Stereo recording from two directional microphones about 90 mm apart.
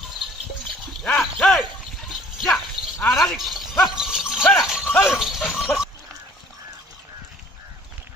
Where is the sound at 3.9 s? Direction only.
5° right (ahead or behind).